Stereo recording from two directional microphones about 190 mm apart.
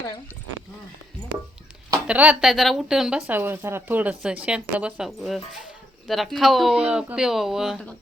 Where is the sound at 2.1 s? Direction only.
5° right (ahead or behind).